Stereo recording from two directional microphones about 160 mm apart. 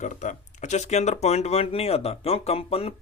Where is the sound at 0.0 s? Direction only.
50° left (ahead or behind).